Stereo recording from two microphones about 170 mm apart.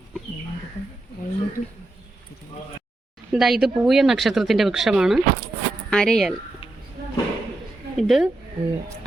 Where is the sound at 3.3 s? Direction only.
Centre (ahead or behind).